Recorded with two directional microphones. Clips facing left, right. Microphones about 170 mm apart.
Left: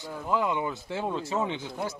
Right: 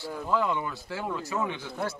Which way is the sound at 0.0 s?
15° left (ahead or behind).